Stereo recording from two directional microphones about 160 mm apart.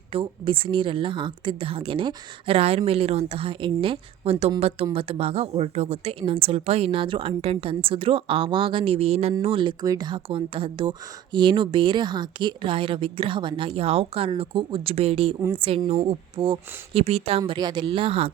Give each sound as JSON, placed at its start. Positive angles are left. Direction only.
{"t": 0.1, "sound": "speech", "side_deg": -30}